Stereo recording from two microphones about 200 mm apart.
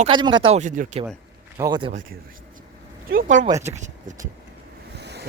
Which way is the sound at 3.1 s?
40° right (ahead or behind).